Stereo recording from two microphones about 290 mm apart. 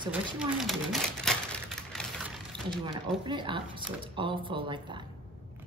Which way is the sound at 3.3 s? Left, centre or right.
Centre.